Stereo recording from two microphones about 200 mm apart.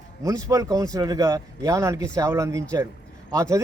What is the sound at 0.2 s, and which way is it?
Speech, 15° right (ahead or behind).